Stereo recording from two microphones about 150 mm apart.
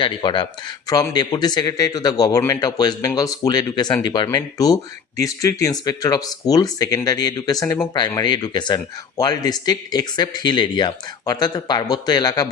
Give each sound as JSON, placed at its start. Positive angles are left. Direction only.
{"t": 0.0, "sound": "speech", "side_deg": 30}